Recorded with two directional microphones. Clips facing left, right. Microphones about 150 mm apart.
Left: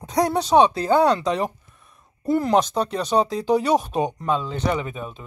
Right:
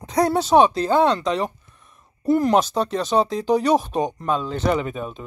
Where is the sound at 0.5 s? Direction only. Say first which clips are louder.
Right 1 dB; 10° left (ahead or behind).